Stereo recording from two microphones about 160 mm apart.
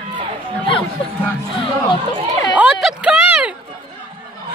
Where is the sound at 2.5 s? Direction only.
5° right (ahead or behind).